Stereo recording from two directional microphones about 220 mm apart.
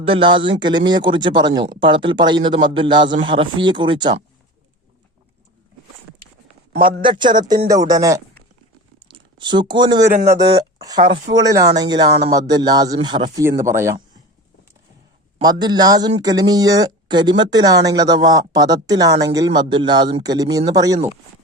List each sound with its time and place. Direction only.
0.0 s speech: 25° right (ahead or behind)
7.0 s a man's voice: 20° right (ahead or behind)
15.4 s a man's voice: 20° right (ahead or behind)